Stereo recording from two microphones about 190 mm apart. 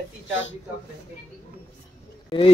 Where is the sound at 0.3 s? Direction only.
85° left.